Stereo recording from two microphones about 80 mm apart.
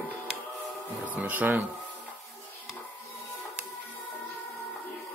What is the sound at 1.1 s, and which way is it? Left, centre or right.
Speech, right.